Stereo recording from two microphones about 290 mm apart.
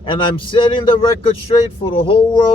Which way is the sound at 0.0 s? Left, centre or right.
Centre.